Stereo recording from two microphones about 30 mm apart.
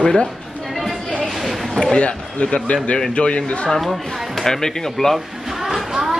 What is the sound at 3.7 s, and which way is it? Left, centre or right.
Speech, centre.